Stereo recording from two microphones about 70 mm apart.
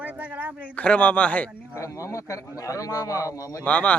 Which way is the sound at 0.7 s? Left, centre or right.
Centre.